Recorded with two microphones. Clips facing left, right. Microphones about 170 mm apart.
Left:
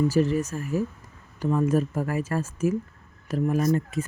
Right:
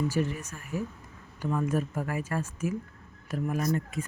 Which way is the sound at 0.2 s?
40° left (ahead or behind).